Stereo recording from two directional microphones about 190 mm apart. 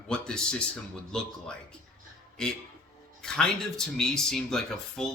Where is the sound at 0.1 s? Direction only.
5° left (ahead or behind).